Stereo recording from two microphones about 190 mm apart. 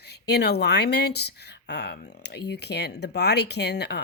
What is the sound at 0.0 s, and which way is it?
Speech, 60° left (ahead or behind).